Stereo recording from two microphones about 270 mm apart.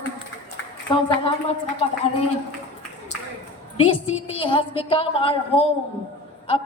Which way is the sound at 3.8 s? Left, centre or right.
Left.